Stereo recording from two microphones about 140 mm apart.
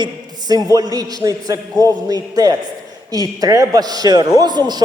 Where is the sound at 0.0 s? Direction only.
30° right (ahead or behind).